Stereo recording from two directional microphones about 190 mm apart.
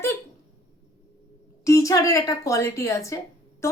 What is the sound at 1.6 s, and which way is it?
A woman's voice, 15° left (ahead or behind).